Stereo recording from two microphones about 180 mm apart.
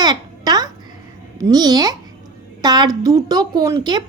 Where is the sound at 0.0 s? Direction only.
20° right (ahead or behind).